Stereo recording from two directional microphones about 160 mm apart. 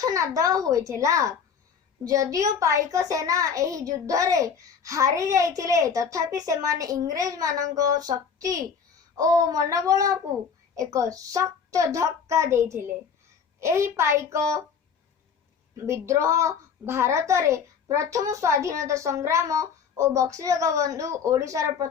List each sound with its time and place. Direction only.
0.0 s a child's voice: 20° right (ahead or behind)
15.7 s a child's voice: 20° right (ahead or behind)